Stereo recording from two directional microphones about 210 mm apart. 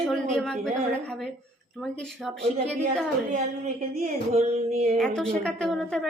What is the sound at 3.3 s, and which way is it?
Speech, 35° right (ahead or behind).